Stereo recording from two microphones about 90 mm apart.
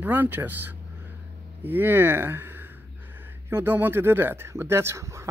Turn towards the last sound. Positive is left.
turn(degrees=-35)  # may be behind; listen again after turning